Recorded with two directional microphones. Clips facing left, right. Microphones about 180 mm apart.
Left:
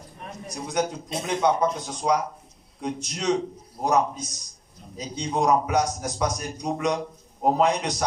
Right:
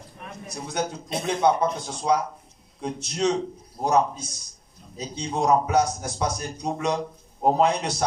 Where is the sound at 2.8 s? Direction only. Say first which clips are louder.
Right 4 dB; 30° right (ahead or behind).